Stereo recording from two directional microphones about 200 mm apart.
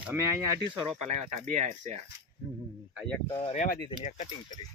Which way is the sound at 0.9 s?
35° right (ahead or behind).